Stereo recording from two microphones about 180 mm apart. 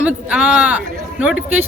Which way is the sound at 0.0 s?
5° right (ahead or behind).